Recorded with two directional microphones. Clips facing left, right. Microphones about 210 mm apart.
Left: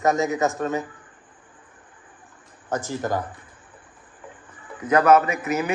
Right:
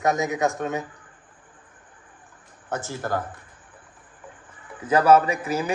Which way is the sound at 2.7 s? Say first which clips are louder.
Left 2 dB; 15° left (ahead or behind).